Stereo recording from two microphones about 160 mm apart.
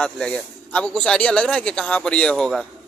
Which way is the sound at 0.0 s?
5° left (ahead or behind).